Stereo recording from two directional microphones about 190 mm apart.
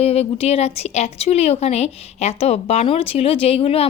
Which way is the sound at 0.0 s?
30° left (ahead or behind).